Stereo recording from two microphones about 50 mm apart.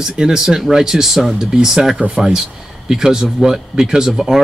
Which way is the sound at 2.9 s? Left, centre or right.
Centre.